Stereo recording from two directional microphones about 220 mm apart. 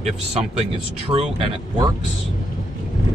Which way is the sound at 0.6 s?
25° right (ahead or behind).